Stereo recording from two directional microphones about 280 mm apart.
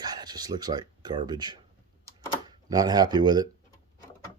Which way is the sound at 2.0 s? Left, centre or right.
Centre.